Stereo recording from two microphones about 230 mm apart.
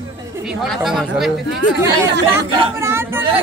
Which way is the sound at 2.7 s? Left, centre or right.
Centre.